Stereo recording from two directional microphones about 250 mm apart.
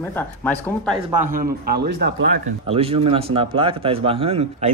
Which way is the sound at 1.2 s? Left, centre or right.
Right.